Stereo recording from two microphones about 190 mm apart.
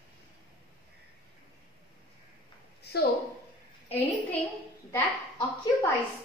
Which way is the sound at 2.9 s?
60° left (ahead or behind).